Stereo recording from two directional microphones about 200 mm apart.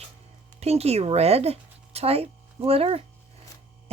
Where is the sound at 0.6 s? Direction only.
30° right (ahead or behind).